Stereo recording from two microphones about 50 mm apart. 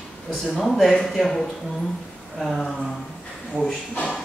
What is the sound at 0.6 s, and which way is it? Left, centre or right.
Speech, centre.